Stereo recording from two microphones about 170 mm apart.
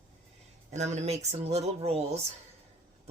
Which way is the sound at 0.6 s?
40° right (ahead or behind).